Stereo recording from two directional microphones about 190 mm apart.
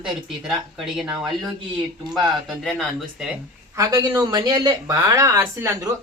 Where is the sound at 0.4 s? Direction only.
Centre (ahead or behind).